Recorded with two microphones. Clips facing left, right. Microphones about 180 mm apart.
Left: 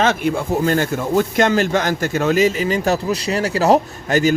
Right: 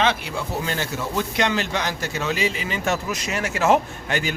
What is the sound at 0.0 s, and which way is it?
A man's voice, 50° left (ahead or behind).